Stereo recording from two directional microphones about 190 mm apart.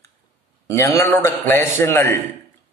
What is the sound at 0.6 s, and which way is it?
A man's voice, 15° left (ahead or behind).